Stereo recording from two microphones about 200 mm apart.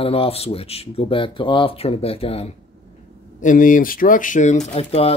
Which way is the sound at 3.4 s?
40° left (ahead or behind).